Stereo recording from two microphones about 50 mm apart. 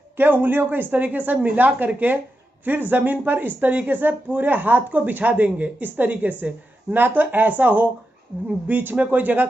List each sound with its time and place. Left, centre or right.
0.2 s speech: right